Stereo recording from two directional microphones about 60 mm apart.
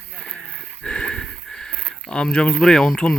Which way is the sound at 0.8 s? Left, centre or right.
Centre.